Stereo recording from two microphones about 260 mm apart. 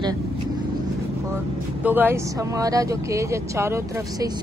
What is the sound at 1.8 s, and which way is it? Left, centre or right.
Speech, centre.